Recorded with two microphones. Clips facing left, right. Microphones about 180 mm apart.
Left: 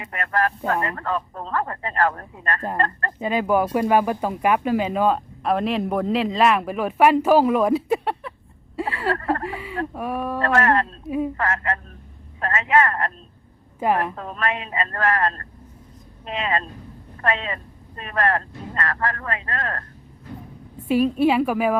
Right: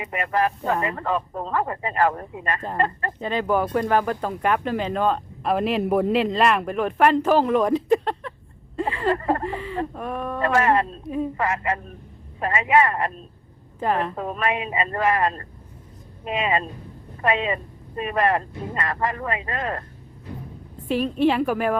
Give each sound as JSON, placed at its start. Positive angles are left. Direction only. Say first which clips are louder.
{"t": 0.0, "sound": "speech", "louder": "right 1 dB", "side_deg": -10}
{"t": 3.2, "sound": "speech", "louder": "left 2 dB", "side_deg": 10}
{"t": 8.8, "sound": "a sound", "louder": "right 1 dB", "side_deg": 5}
{"t": 9.1, "sound": "speech", "louder": "right 1 dB", "side_deg": -15}
{"t": 9.4, "sound": "speech", "louder": "right 1 dB", "side_deg": 10}
{"t": 10.4, "sound": "speech", "louder": "right 1 dB", "side_deg": -10}
{"t": 13.7, "sound": "a woman's voice", "louder": "left 2 dB", "side_deg": 10}
{"t": 14.2, "sound": "speech", "louder": "right 2 dB", "side_deg": -10}
{"t": 20.7, "sound": "speech", "louder": "left 4 dB", "side_deg": 10}